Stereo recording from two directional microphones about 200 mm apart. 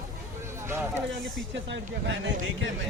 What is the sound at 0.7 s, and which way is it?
Speech, 10° right (ahead or behind).